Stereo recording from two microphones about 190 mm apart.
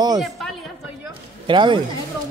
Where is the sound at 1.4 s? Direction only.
25° right (ahead or behind).